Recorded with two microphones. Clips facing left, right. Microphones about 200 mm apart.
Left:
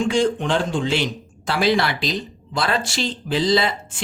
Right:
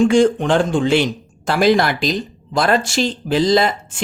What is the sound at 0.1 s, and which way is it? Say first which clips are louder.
Speech: right 6 dB; 50° right (ahead or behind).